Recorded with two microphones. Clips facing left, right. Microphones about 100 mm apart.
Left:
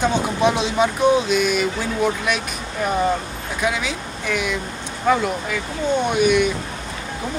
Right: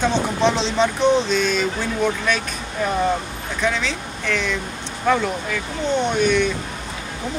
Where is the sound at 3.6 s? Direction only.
10° left (ahead or behind).